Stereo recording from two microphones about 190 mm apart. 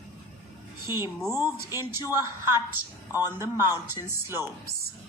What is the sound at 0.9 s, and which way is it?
Speech, 15° right (ahead or behind).